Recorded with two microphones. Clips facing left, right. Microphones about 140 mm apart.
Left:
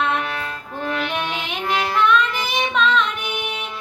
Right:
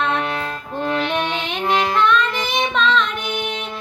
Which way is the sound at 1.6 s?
25° right (ahead or behind).